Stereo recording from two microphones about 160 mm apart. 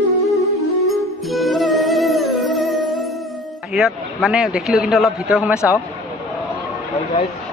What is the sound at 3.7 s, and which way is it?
A man's voice, 5° right (ahead or behind).